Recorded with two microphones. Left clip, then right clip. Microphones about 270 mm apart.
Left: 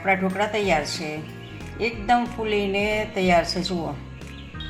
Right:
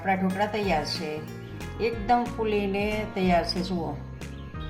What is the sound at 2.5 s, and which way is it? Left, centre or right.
Music, left.